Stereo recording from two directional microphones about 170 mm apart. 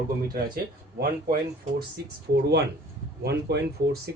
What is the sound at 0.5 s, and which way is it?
Speech, 60° right (ahead or behind).